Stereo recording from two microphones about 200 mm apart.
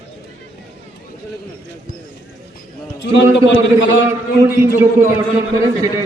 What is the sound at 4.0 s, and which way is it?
Speech, 50° left (ahead or behind).